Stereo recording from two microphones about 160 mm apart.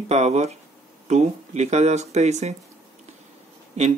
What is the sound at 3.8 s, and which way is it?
Speech, 45° right (ahead or behind).